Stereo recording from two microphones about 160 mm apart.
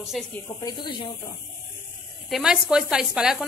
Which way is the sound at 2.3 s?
5° right (ahead or behind).